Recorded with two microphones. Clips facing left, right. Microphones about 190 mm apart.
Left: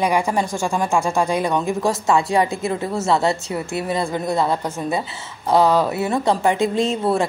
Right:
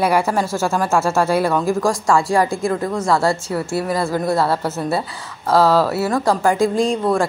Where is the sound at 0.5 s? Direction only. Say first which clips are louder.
Right 2 dB; 5° right (ahead or behind).